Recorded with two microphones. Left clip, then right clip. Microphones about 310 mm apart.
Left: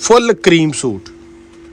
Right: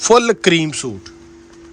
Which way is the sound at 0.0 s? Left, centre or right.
Centre.